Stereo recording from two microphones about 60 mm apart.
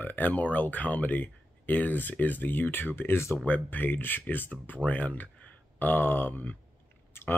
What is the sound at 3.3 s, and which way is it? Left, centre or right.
Speech, left.